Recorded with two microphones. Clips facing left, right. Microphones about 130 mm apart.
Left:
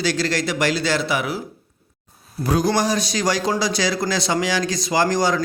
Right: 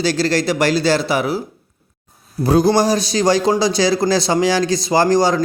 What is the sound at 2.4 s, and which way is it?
A man's voice, 30° right (ahead or behind).